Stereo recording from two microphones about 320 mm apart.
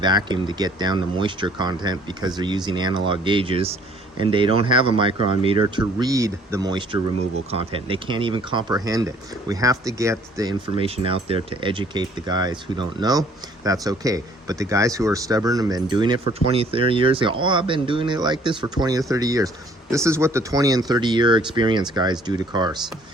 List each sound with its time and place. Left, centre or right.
0.0 s speech: centre